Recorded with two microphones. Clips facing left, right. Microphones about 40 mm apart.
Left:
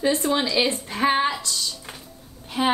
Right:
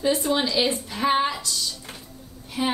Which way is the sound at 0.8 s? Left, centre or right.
Left.